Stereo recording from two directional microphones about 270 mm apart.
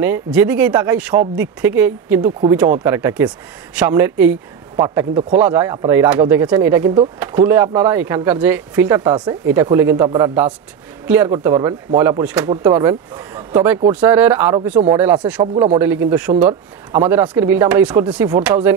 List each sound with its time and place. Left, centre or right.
0.0 s speech: centre
15.4 s speech: centre
15.8 s speech: centre